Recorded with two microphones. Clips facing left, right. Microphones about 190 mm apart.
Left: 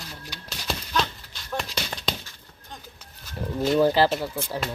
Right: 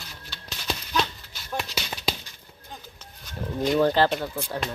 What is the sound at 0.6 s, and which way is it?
Horse, centre (ahead or behind).